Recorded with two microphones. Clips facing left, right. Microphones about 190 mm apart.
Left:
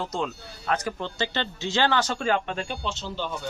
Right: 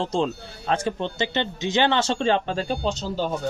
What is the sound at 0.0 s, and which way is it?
Speech, 30° right (ahead or behind).